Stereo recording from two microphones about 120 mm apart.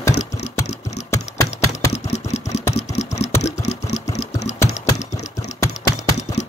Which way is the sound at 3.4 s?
70° left (ahead or behind).